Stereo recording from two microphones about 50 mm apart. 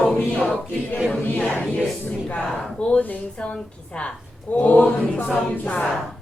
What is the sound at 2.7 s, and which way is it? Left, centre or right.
A woman's voice, left.